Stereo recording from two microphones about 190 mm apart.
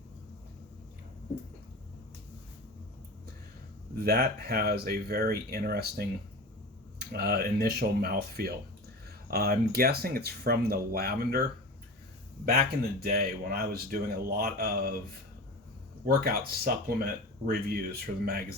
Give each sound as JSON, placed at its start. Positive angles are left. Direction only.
{"t": 3.9, "sound": "speech", "side_deg": -55}
{"t": 7.1, "sound": "speech", "side_deg": -55}
{"t": 12.5, "sound": "speech", "side_deg": -55}
{"t": 16.0, "sound": "speech", "side_deg": -55}
{"t": 18.0, "sound": "speech", "side_deg": -55}